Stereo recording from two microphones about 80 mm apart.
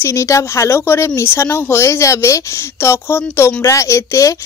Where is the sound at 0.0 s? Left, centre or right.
Left.